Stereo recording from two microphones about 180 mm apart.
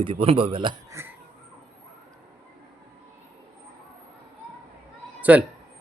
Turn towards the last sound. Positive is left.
turn(degrees=-10)  # may be behind; listen again after turning